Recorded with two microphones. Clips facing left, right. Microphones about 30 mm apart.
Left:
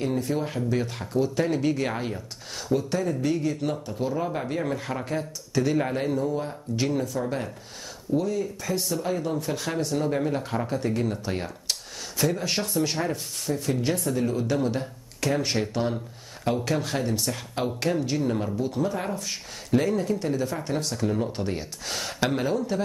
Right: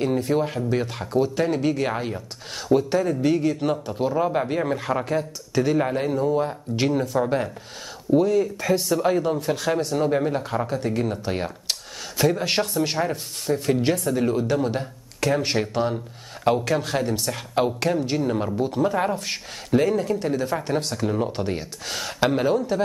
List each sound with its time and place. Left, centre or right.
0.0 s speech: right
2.5 s speech: right; by 6.1 s centre
6.1 s speech: right
8.5 s speech: right
9.1 s speech: right
12.7 s speech: right
13.5 s speech: right
18.9 s speech: right
19.7 s speech: centre
21.5 s speech: centre